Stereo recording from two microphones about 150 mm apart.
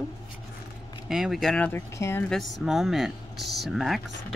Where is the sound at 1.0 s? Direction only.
5° right (ahead or behind); by 2.3 s 15° left (ahead or behind).